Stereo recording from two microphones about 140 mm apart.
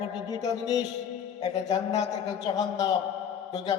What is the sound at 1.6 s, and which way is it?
Speech, 55° left (ahead or behind).